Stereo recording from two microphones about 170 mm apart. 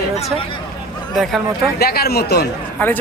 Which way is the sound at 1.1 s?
Centre (ahead or behind).